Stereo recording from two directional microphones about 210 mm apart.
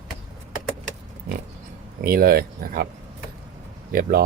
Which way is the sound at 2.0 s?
45° right (ahead or behind).